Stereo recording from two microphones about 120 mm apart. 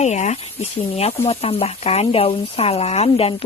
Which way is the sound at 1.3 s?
55° left (ahead or behind).